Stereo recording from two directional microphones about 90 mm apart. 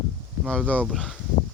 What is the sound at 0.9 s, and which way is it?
Speech, centre (ahead or behind).